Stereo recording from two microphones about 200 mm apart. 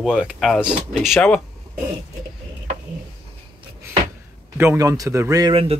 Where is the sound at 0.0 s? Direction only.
5° right (ahead or behind).